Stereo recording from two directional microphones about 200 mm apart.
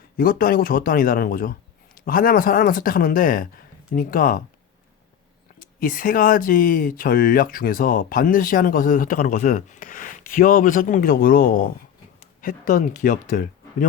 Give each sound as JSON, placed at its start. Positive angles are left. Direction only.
{"t": 0.2, "sound": "speech", "side_deg": 45}
{"t": 5.5, "sound": "a sound", "side_deg": 45}
{"t": 5.8, "sound": "speech", "side_deg": 45}